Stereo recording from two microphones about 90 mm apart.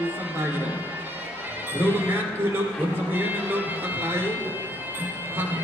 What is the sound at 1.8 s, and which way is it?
Speech, 20° right (ahead or behind).